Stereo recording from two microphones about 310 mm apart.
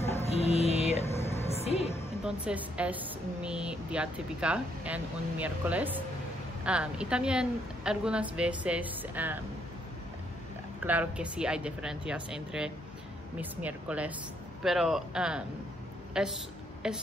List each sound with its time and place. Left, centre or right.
0.0 s music: centre
2.2 s a woman's voice: centre
10.8 s a woman's voice: centre